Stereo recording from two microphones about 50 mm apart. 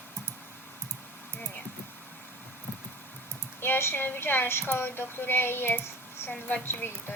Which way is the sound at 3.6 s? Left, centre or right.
Left.